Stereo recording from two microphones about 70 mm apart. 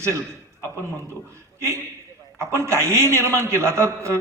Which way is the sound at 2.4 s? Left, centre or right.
Right.